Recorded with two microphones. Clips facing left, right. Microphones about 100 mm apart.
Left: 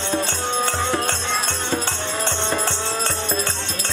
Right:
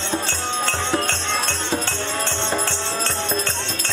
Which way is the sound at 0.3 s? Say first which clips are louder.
Left 2 dB; 10° left (ahead or behind).